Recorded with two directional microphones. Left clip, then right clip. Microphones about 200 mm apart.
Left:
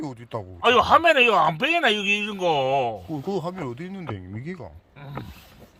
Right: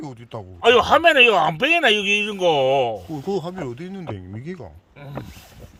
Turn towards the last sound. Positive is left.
turn(degrees=0)  # may be behind; listen again after turning